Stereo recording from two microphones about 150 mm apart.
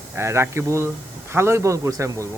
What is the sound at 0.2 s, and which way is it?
Speech, 15° right (ahead or behind).